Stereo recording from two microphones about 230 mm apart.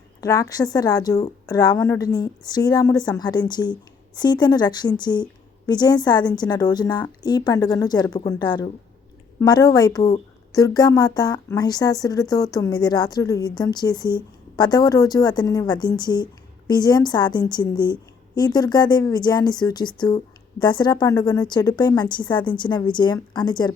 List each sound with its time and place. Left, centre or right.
0.2 s a woman's voice: centre